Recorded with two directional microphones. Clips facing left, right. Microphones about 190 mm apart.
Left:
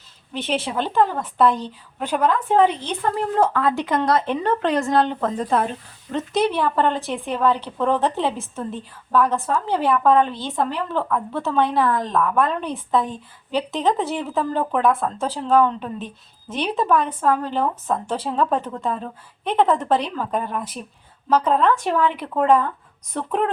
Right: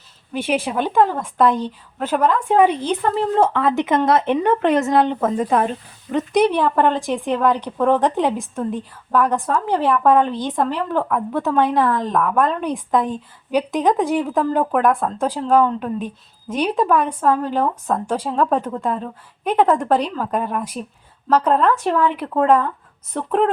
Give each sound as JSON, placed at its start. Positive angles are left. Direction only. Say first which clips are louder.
{"t": 0.3, "sound": "a woman's voice", "louder": "right 3 dB", "side_deg": -10}
{"t": 3.2, "sound": "speech", "louder": "right 1 dB", "side_deg": -25}
{"t": 5.2, "sound": "a woman's voice", "louder": "right 3 dB", "side_deg": -5}